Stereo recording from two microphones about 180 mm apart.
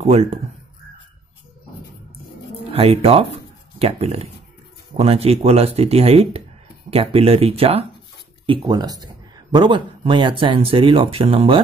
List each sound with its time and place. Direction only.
0.0 s speech: 35° right (ahead or behind)
2.7 s speech: 30° right (ahead or behind)
8.5 s speech: 25° right (ahead or behind)